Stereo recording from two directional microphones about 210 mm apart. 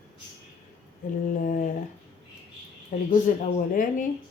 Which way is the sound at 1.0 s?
35° left (ahead or behind).